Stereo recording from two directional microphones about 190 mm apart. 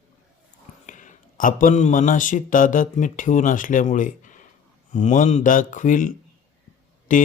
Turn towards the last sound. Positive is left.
turn(degrees=45)  # may be behind; listen again after turning